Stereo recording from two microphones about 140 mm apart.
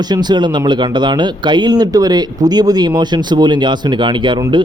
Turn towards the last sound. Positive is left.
turn(degrees=-35)  # may be behind; listen again after turning